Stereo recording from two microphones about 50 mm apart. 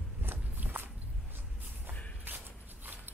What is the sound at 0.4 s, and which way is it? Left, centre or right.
Walk, right.